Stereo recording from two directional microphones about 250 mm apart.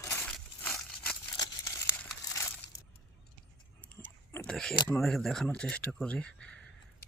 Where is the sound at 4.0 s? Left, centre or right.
Centre.